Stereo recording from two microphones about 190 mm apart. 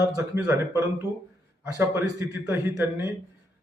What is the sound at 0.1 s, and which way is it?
A man's voice, 15° right (ahead or behind).